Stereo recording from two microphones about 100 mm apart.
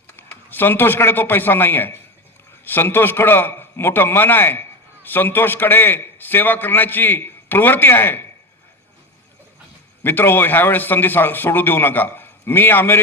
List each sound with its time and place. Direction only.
0.2 s a man's voice: 20° left (ahead or behind)
10.0 s a man's voice: 20° left (ahead or behind)